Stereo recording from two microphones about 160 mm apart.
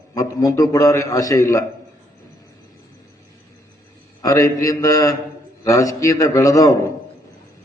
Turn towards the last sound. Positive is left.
turn(degrees=20)  # may be behind; listen again after turning